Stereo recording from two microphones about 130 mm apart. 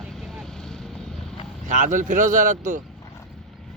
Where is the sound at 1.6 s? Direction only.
75° right (ahead or behind).